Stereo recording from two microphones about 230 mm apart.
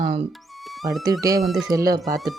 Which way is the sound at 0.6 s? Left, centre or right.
Centre.